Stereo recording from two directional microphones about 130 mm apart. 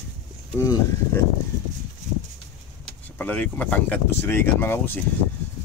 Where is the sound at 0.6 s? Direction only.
25° left (ahead or behind).